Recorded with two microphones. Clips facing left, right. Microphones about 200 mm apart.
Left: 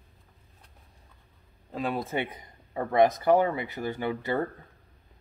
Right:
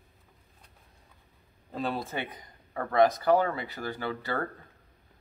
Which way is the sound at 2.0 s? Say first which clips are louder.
Left 5 dB; 25° left (ahead or behind).